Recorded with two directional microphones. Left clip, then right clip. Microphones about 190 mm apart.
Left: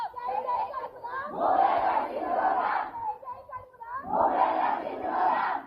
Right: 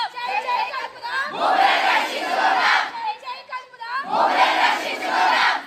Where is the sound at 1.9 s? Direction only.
20° right (ahead or behind).